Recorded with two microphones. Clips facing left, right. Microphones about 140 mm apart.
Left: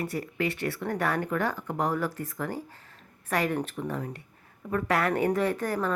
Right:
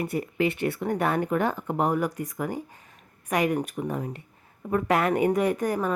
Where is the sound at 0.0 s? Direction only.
20° right (ahead or behind).